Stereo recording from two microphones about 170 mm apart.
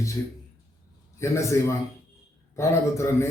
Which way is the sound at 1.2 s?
15° left (ahead or behind).